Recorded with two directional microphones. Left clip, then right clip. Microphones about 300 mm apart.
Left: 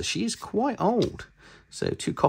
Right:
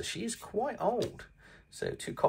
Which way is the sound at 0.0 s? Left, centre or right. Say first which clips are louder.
Left 8 dB; centre.